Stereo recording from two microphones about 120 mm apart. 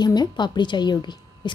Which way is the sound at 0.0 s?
35° left (ahead or behind).